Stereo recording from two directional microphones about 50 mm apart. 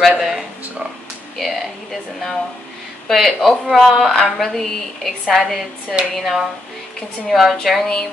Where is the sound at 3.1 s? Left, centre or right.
Centre.